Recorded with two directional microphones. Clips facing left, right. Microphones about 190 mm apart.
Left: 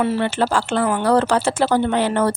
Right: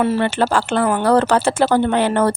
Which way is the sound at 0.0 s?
50° right (ahead or behind).